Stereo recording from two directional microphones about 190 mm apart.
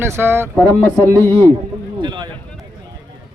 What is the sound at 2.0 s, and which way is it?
Speech, 25° right (ahead or behind).